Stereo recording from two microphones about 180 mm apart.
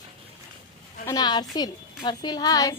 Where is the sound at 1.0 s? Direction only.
20° left (ahead or behind).